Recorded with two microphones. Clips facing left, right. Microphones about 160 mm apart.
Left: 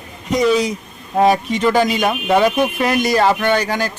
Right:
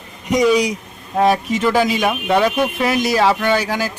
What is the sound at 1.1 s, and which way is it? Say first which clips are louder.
Speech: left 1 dB; centre (ahead or behind).